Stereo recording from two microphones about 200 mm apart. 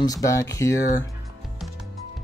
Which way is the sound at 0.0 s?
15° left (ahead or behind).